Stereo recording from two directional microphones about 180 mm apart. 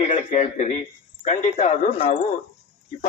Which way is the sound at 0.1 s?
40° left (ahead or behind).